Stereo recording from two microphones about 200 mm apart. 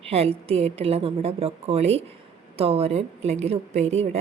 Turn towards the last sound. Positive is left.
turn(degrees=-35)  # may be behind; listen again after turning